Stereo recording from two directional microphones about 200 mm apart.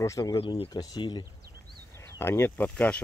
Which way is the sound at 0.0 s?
15° left (ahead or behind).